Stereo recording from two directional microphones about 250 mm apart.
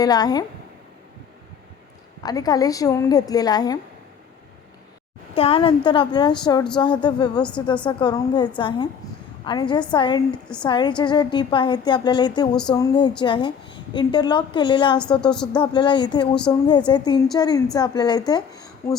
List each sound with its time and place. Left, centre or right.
0.0 s a woman's voice: centre
2.2 s a woman's voice: centre
5.3 s a woman's voice: left
15.2 s a woman's voice: centre
15.5 s a woman's voice: centre